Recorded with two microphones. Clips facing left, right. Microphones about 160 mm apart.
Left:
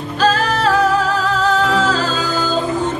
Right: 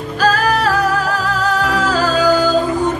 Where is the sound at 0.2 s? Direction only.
25° left (ahead or behind).